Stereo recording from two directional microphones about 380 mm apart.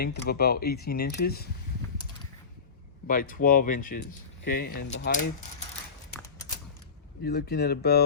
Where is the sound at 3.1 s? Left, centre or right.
Left.